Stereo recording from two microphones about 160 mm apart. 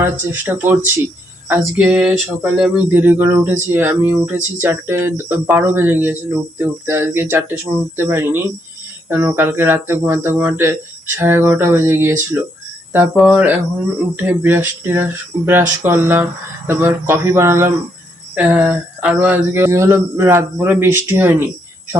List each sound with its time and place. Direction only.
0.0 s speech: 15° right (ahead or behind)